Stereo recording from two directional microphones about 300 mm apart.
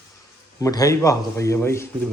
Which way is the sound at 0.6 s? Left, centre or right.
Centre.